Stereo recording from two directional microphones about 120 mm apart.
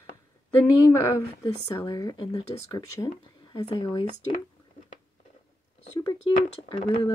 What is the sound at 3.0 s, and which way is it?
Speech, 50° left (ahead or behind).